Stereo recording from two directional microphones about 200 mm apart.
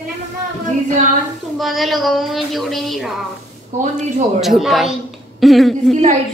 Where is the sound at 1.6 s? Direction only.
Centre (ahead or behind).